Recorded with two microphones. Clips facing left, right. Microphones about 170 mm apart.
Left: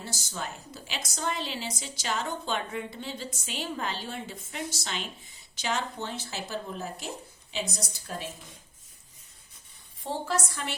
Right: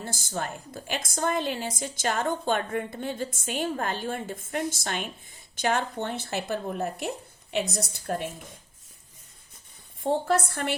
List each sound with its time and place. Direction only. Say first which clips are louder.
0.0 s a woman's voice: right 5 dB; 50° right (ahead or behind)
10.0 s speech: right 7 dB; 55° right (ahead or behind)